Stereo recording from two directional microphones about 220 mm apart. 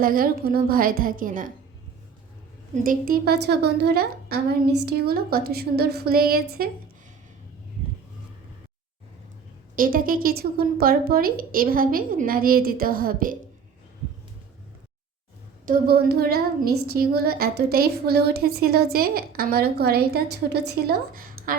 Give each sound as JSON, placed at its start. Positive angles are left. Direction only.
{"t": 0.0, "sound": "a woman's voice", "side_deg": -40}
{"t": 2.7, "sound": "a woman's voice", "side_deg": -40}
{"t": 9.7, "sound": "a woman's voice", "side_deg": -40}
{"t": 15.6, "sound": "a woman's voice", "side_deg": -40}